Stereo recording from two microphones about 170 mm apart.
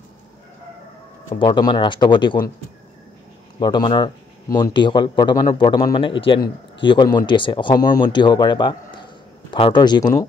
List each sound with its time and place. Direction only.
1.4 s speech: 25° left (ahead or behind)
3.5 s speech: 25° left (ahead or behind)